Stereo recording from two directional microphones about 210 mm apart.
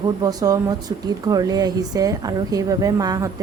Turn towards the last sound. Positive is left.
turn(degrees=-15)  # may be behind; listen again after turning